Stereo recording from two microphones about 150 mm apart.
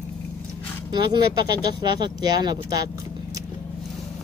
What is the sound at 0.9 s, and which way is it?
Speech, 30° right (ahead or behind).